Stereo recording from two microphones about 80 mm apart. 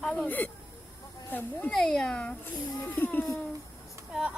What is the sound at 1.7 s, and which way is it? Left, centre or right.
Speech, centre.